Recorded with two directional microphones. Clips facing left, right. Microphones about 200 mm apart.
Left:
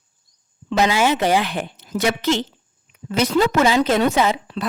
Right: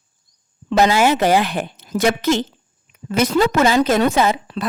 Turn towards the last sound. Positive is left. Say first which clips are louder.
# right 2 dB
turn(degrees=-45)  # may be behind; listen again after turning